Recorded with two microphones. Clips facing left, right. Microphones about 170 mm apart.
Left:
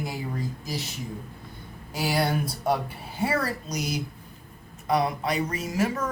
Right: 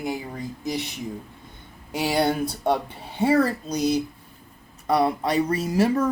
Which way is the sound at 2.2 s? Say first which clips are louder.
Right 4 dB; 25° right (ahead or behind).